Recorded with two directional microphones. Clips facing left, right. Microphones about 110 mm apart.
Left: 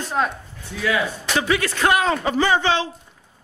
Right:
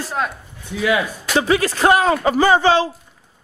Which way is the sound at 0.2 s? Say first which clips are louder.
Left 1 dB; centre (ahead or behind).